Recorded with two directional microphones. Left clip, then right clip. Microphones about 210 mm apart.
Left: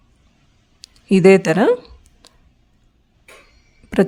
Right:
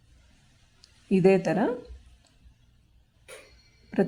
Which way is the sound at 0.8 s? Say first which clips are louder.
Left 9 dB; 45° left (ahead or behind).